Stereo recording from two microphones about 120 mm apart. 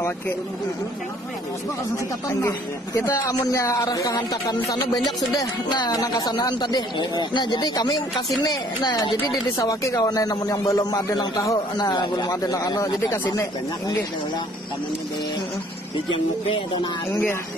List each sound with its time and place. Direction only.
2.2 s speech: 25° left (ahead or behind)
16.1 s speech: 45° left (ahead or behind)